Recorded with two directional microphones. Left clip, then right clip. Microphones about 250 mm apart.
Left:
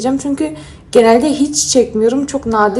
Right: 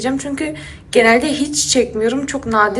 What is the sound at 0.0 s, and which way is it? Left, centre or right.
A woman's voice, left.